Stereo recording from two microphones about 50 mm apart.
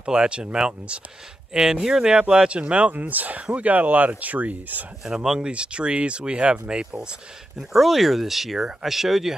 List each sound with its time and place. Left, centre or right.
0.0 s speech: centre; by 4.8 s right
5.0 s speech: centre
7.7 s speech: centre